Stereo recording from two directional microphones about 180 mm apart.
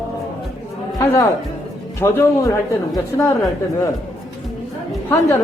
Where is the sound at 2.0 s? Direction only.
15° left (ahead or behind).